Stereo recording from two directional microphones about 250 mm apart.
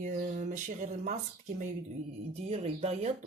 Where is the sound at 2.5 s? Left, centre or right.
Right.